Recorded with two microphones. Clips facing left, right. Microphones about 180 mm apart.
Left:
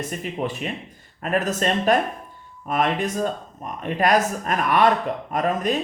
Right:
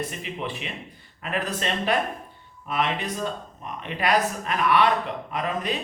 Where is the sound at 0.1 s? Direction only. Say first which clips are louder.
Left 5 dB; 45° left (ahead or behind).